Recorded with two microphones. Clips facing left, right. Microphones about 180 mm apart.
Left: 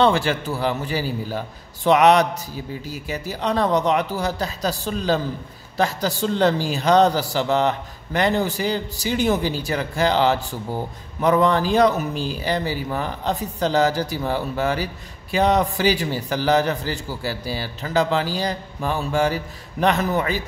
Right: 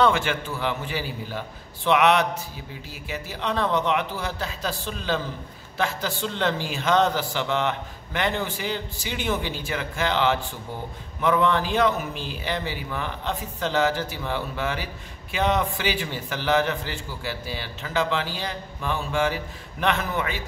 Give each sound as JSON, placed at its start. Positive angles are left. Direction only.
{"t": 0.0, "sound": "a man's voice", "side_deg": 35}